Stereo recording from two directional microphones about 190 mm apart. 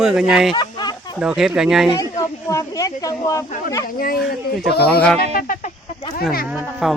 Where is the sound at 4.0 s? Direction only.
50° left (ahead or behind).